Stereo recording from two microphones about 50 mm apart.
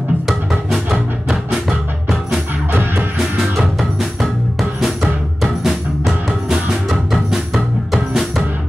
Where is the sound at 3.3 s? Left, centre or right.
Centre.